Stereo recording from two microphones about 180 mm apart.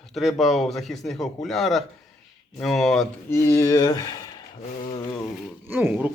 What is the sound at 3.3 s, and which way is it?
Speech, 15° left (ahead or behind).